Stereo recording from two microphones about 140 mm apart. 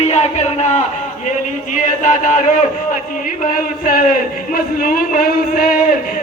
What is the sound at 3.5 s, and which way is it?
Speech, 80° left.